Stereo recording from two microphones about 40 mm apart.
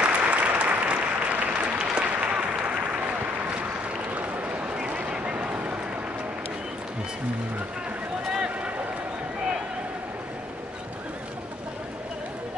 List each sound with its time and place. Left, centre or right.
0.0 s applause: right
1.5 s applause: right
4.1 s a sound: right
4.7 s vehicle: right